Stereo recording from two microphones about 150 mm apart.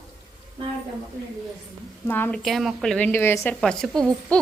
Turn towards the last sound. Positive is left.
turn(degrees=5)  # may be behind; listen again after turning